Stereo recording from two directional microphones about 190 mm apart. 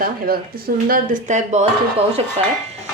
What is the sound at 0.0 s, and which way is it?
Speech, 50° right (ahead or behind).